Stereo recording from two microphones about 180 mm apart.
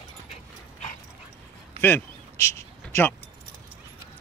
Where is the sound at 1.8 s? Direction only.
15° left (ahead or behind).